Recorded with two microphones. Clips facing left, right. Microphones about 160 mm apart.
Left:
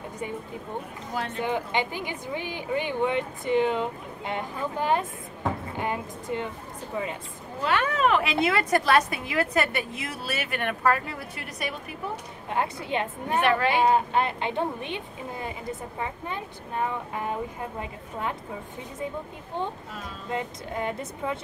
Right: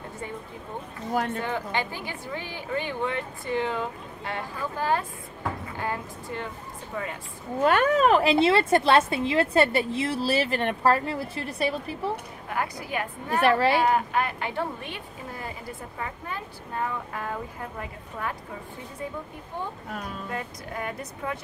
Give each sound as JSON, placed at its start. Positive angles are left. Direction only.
{"t": 1.4, "sound": "a woman's voice", "side_deg": 15}
{"t": 7.6, "sound": "a woman's voice", "side_deg": -45}
{"t": 12.4, "sound": "a woman's voice", "side_deg": 25}
{"t": 13.4, "sound": "a woman's voice", "side_deg": -35}
{"t": 13.8, "sound": "a woman's voice", "side_deg": 25}
{"t": 20.2, "sound": "a woman's voice", "side_deg": 25}